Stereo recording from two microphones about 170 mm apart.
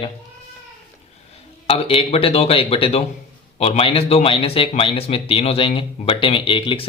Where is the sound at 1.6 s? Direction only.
35° left (ahead or behind).